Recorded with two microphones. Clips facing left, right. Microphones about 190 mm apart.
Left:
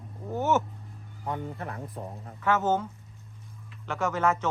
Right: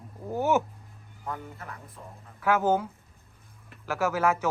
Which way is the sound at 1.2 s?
25° left (ahead or behind).